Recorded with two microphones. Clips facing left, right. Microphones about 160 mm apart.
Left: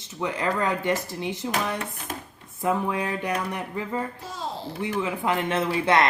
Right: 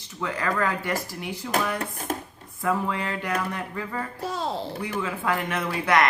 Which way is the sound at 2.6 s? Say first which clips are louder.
Left 1 dB; 20° left (ahead or behind).